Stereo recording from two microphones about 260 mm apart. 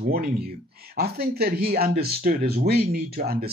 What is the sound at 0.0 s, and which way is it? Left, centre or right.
Speech, right.